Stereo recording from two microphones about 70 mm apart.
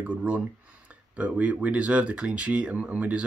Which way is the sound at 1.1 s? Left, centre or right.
Centre.